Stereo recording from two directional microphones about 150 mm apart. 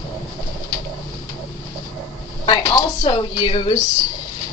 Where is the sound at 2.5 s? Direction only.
30° left (ahead or behind).